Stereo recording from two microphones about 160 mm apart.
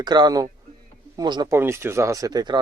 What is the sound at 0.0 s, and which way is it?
Speech, 25° right (ahead or behind).